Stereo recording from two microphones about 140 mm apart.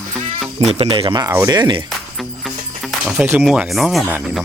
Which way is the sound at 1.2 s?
20° right (ahead or behind).